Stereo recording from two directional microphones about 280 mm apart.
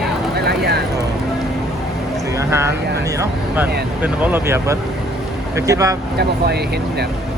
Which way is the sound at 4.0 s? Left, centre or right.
Centre.